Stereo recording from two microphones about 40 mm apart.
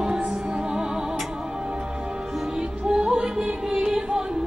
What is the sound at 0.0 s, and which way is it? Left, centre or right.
Music, centre.